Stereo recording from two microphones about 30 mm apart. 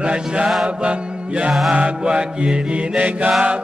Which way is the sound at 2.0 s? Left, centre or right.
Right.